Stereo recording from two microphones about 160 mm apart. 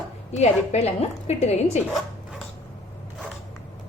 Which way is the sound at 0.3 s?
40° left (ahead or behind).